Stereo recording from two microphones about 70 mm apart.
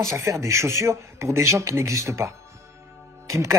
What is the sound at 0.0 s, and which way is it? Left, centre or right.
A man's voice, right.